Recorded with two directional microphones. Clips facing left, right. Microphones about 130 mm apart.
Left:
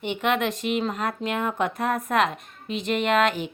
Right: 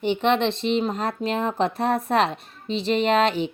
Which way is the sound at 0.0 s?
30° right (ahead or behind).